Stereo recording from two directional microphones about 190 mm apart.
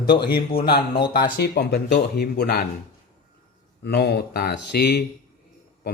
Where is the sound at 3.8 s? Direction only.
55° left (ahead or behind).